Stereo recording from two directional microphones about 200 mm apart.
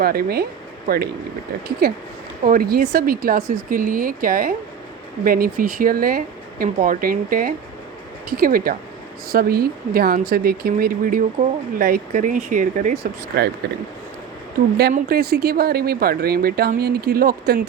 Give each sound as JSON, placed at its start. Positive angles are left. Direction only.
{"t": 0.0, "sound": "speech", "side_deg": -50}
{"t": 2.4, "sound": "speech", "side_deg": -45}
{"t": 13.0, "sound": "speech", "side_deg": -55}
{"t": 14.9, "sound": "speech", "side_deg": -45}